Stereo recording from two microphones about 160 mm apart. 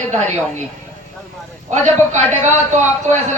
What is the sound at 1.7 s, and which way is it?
A man's voice, 45° right (ahead or behind).